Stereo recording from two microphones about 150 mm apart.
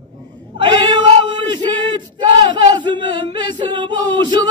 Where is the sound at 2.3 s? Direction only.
30° right (ahead or behind).